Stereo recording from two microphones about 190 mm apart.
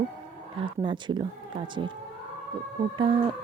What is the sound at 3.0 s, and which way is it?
Speech, 25° right (ahead or behind).